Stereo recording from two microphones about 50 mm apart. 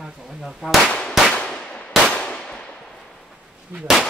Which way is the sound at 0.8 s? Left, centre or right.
Left.